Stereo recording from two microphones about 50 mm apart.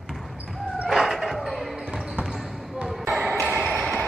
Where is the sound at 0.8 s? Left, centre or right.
Centre.